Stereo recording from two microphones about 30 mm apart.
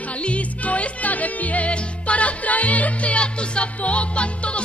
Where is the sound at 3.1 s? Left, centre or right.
Left.